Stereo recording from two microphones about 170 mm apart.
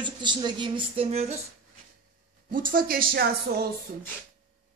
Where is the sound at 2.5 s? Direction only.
55° right (ahead or behind).